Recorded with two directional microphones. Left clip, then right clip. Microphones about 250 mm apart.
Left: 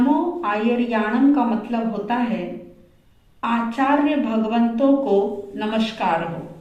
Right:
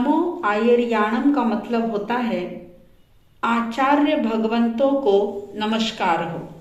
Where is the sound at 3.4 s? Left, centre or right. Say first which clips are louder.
Right 1 dB; right.